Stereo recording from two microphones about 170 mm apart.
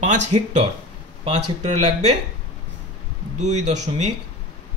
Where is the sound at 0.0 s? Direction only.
45° right (ahead or behind).